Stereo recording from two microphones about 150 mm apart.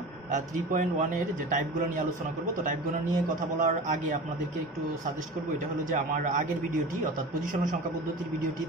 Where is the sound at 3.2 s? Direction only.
55° right (ahead or behind).